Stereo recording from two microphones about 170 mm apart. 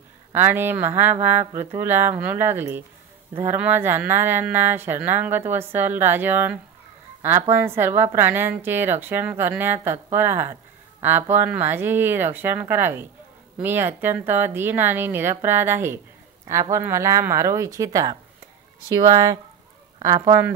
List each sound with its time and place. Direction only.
0.3 s a woman's voice: 10° right (ahead or behind)